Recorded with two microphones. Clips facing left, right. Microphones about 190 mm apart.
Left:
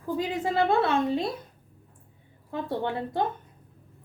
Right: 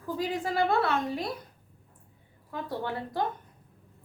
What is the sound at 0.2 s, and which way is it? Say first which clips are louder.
A woman's voice: left 2 dB; 20° left (ahead or behind).